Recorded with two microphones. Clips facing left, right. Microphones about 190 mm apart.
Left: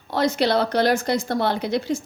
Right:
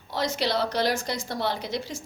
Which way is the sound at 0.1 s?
55° left (ahead or behind).